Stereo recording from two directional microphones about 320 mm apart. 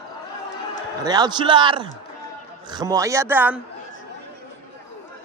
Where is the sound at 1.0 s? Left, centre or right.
Centre.